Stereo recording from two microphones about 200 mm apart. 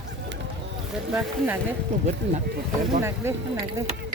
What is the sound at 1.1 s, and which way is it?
Speech, 10° right (ahead or behind).